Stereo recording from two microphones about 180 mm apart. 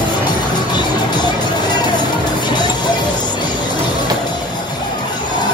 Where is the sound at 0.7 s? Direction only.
25° left (ahead or behind).